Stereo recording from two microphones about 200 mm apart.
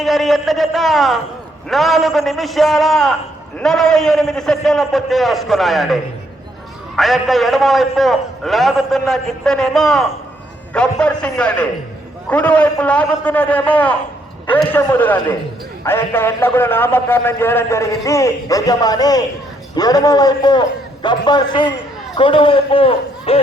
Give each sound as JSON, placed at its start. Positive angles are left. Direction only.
{"t": 0.0, "sound": "a man's voice", "side_deg": 0}